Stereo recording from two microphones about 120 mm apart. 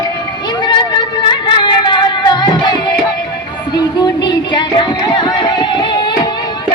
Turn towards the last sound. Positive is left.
turn(degrees=40)  # may be behind; listen again after turning